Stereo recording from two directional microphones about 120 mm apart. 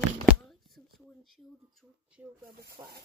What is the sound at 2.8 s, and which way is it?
Speech, 45° right (ahead or behind).